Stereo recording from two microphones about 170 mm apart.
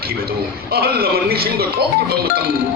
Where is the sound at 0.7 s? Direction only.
65° right (ahead or behind).